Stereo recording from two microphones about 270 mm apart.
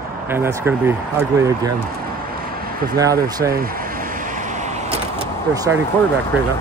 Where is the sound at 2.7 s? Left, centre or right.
Right.